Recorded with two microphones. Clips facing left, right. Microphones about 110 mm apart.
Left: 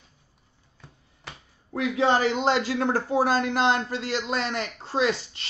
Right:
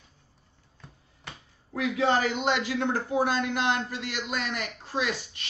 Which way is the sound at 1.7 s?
30° left (ahead or behind).